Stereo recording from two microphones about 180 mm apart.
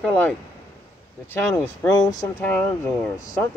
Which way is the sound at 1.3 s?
15° left (ahead or behind).